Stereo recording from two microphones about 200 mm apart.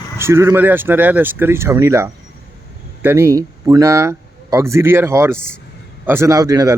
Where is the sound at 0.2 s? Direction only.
10° right (ahead or behind).